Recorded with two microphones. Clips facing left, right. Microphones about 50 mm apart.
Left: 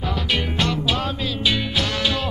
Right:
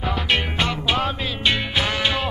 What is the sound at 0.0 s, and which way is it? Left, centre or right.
Music, centre.